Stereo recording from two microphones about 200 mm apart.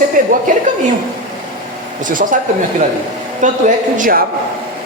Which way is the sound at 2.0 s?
40° right (ahead or behind).